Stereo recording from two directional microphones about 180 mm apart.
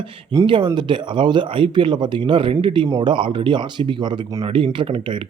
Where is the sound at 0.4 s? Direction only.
25° right (ahead or behind).